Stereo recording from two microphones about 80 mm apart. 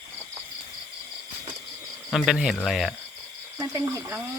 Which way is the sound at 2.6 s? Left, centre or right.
Centre.